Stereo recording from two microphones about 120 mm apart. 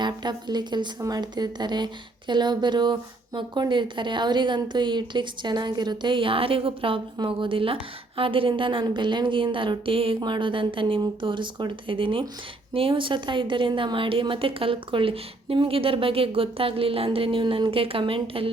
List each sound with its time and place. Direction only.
0.0 s a woman's voice: 35° right (ahead or behind)